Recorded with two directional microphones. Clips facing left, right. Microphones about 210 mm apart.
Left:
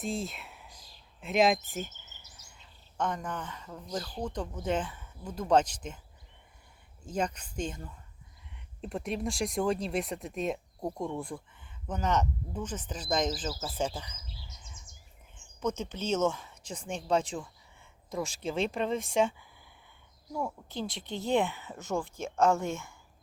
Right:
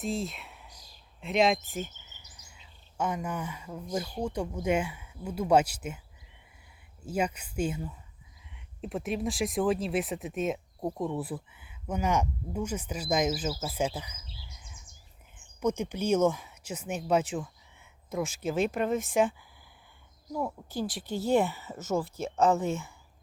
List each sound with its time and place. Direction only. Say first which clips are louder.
0.0 s speech: right 2 dB; centre (ahead or behind)
3.0 s speech: right 2 dB; 10° right (ahead or behind)
7.0 s speech: right 2 dB; 10° right (ahead or behind)
15.6 s speech: right 4 dB; 10° right (ahead or behind)
20.6 s speech: right 3 dB; 5° right (ahead or behind)
22.0 s speech: right 1 dB; 35° right (ahead or behind)